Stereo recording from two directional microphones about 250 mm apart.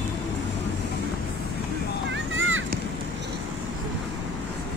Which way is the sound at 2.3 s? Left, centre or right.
Right.